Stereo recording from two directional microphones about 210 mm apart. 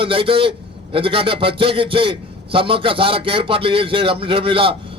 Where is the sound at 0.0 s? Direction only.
25° right (ahead or behind).